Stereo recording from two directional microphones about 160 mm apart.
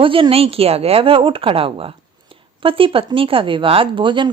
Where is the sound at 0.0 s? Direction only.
35° right (ahead or behind).